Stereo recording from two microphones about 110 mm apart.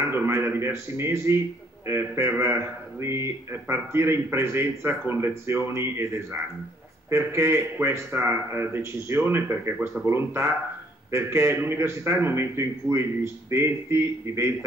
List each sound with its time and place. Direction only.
0.0 s speech: 20° right (ahead or behind)